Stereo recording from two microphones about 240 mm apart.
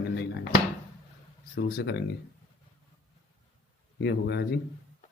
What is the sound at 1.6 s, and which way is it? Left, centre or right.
Speech, left.